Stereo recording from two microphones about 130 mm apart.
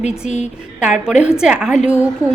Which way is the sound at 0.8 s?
5° right (ahead or behind).